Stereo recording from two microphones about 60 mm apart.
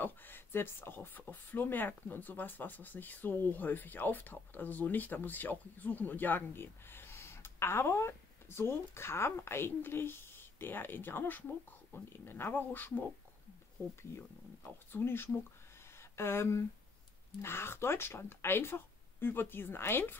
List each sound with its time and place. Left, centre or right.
0.0 s speech: left
14.1 s speech: left